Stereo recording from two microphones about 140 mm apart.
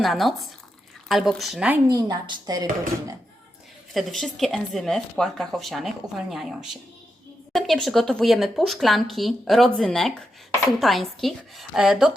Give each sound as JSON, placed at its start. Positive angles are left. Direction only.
{"t": 0.0, "sound": "speech", "side_deg": 0}
{"t": 1.9, "sound": "a woman's voice", "side_deg": -25}
{"t": 3.9, "sound": "speech", "side_deg": 0}